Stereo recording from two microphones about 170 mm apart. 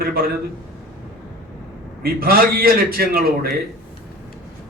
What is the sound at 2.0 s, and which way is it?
A man's voice, 60° right (ahead or behind).